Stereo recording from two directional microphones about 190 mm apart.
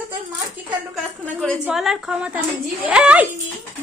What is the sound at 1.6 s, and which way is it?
A woman's voice, 5° right (ahead or behind).